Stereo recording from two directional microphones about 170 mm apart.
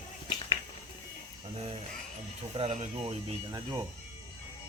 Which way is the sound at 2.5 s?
45° right (ahead or behind).